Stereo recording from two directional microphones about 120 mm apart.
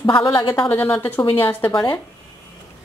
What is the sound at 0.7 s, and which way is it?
Speech, 20° left (ahead or behind).